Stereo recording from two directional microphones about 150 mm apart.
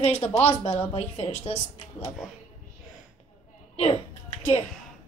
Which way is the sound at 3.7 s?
45° left (ahead or behind).